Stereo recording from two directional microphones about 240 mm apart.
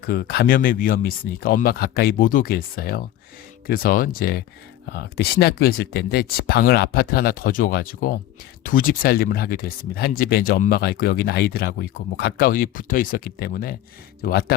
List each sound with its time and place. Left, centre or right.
0.0 s speech: left